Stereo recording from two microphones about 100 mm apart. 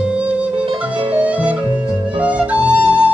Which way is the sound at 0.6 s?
55° right (ahead or behind).